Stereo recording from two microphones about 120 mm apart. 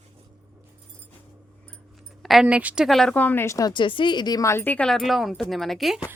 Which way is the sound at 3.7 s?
45° left (ahead or behind).